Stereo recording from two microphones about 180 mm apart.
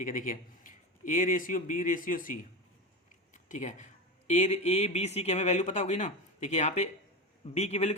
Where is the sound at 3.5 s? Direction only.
40° left (ahead or behind).